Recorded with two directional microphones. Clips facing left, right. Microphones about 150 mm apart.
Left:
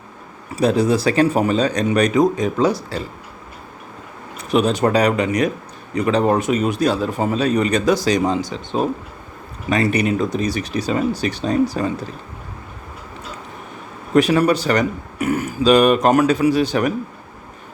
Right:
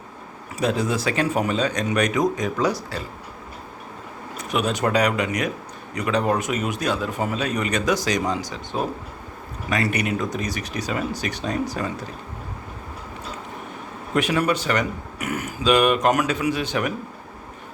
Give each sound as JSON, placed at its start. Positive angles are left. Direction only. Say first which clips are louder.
{"t": 0.5, "sound": "speech", "louder": "left 6 dB", "side_deg": 35}
{"t": 4.4, "sound": "a man's voice", "louder": "left 7 dB", "side_deg": 30}
{"t": 14.2, "sound": "speech", "louder": "left 7 dB", "side_deg": 35}